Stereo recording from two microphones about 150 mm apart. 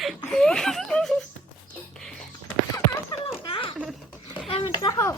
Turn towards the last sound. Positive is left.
turn(degrees=20)  # may be behind; listen again after turning